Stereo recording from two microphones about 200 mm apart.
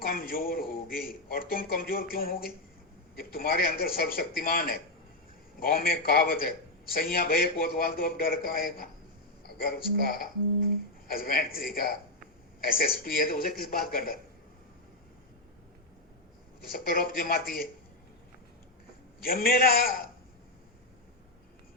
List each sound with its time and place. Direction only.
0.0 s a man's voice: 45° left (ahead or behind)
16.7 s a man's voice: 45° left (ahead or behind)
19.2 s a man's voice: 50° left (ahead or behind)